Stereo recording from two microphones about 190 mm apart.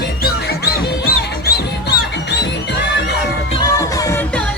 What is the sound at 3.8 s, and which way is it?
Music, 15° left (ahead or behind).